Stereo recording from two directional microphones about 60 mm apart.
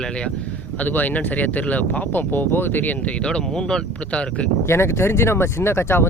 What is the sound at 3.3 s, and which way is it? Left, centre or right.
Speech, centre.